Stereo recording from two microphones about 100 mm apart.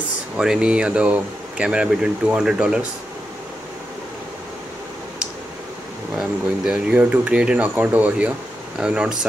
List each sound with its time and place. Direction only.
0.4 s speech: 10° right (ahead or behind)
6.1 s speech: 10° right (ahead or behind)